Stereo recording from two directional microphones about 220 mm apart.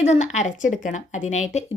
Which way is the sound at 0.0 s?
30° left (ahead or behind).